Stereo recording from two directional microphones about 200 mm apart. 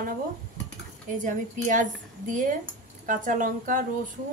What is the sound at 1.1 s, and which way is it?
Speech, 40° right (ahead or behind).